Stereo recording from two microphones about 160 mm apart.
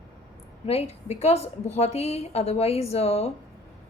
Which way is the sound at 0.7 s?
40° left (ahead or behind).